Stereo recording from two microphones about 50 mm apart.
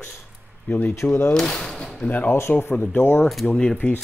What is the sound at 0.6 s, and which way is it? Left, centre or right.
Speech, left.